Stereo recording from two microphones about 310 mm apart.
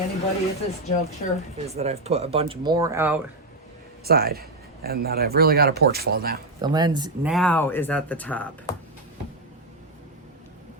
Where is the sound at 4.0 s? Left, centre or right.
Right.